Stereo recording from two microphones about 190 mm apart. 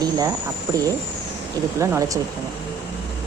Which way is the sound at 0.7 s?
20° right (ahead or behind).